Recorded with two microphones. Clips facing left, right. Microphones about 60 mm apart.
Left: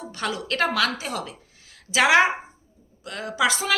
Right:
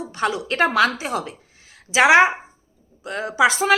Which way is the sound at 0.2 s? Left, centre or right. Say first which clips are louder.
Right 5 dB; right.